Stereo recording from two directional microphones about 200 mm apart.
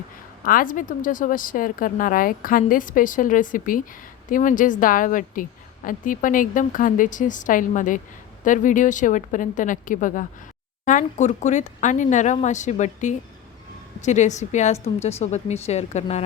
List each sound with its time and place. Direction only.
0.4 s a woman's voice: 45° left (ahead or behind)